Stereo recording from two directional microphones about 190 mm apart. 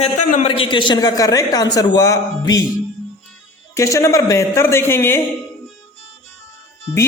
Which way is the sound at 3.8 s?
15° left (ahead or behind).